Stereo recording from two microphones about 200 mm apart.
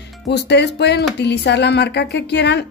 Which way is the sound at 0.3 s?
60° left (ahead or behind).